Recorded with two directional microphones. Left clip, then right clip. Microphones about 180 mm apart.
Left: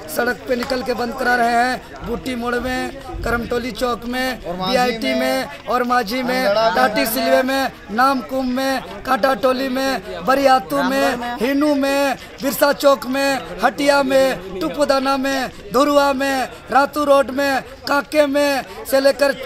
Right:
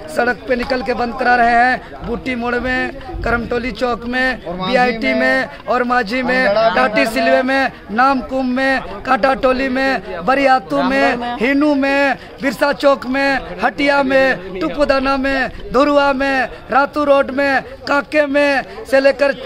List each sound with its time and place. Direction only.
0.1 s a man's voice: centre (ahead or behind)
7.1 s speech: 25° right (ahead or behind)
7.4 s a man's voice: centre (ahead or behind)